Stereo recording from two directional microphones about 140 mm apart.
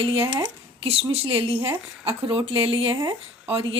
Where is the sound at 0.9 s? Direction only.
45° right (ahead or behind).